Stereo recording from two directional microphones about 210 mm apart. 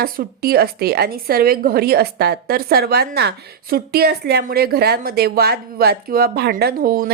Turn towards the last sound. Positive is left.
turn(degrees=-45)  # may be behind; listen again after turning